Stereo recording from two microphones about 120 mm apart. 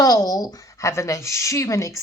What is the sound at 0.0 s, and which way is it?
A woman's voice, 30° left (ahead or behind).